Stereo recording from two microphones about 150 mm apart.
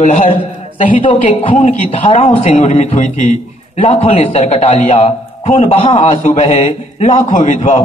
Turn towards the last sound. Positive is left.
turn(degrees=55)  # may be behind; listen again after turning